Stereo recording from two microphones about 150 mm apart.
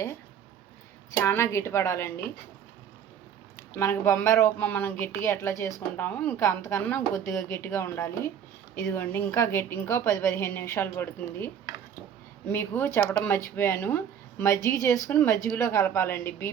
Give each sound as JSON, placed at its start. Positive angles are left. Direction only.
{"t": 1.1, "sound": "speech", "side_deg": 15}
{"t": 3.8, "sound": "speech", "side_deg": 15}